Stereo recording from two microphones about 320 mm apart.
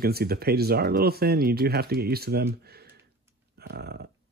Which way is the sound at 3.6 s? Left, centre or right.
Right.